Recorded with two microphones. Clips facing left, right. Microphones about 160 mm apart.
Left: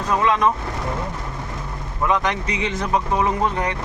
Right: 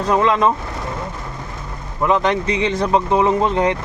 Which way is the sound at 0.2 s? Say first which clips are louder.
Right 1 dB; 30° right (ahead or behind).